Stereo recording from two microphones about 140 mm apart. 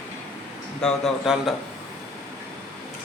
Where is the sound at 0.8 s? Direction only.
5° left (ahead or behind).